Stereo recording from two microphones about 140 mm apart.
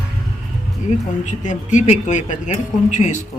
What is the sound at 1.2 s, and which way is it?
Speech, 60° left (ahead or behind).